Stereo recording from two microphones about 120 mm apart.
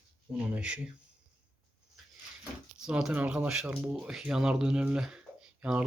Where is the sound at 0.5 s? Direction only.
10° right (ahead or behind).